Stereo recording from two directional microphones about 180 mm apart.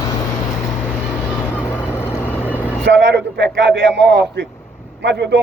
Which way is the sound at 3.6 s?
70° right (ahead or behind).